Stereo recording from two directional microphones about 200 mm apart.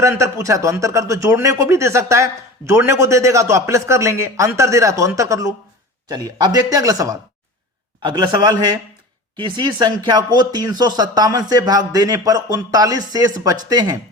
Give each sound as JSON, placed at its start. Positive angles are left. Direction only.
{"t": 0.0, "sound": "a man's voice", "side_deg": -15}